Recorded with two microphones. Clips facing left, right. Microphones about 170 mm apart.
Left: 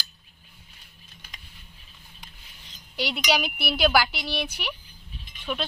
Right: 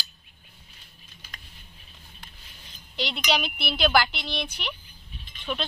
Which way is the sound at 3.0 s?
10° left (ahead or behind).